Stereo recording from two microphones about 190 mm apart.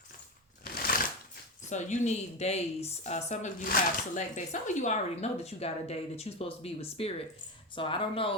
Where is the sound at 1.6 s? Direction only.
40° left (ahead or behind).